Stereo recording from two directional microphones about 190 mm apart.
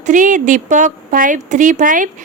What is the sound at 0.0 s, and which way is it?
A woman's voice, 40° right (ahead or behind).